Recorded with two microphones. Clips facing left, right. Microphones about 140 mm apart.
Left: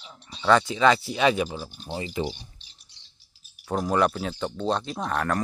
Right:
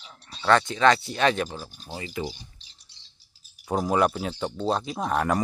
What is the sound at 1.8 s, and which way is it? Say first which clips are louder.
Speech: left 3 dB; 25° left (ahead or behind).